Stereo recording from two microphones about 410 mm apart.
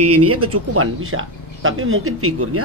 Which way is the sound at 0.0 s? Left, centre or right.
Right.